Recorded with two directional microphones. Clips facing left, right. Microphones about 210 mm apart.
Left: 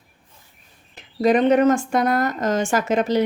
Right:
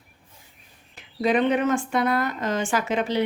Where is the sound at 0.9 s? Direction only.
40° left (ahead or behind).